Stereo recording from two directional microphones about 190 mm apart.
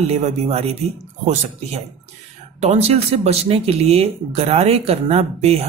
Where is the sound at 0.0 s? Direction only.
35° right (ahead or behind).